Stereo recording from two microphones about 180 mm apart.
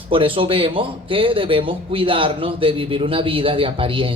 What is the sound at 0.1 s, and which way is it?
Speech, 30° right (ahead or behind).